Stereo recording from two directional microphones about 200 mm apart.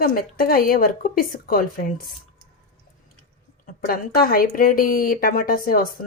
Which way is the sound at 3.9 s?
45° left (ahead or behind).